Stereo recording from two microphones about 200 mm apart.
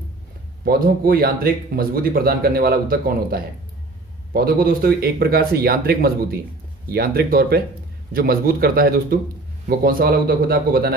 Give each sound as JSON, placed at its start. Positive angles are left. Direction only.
{"t": 0.7, "sound": "speech", "side_deg": -50}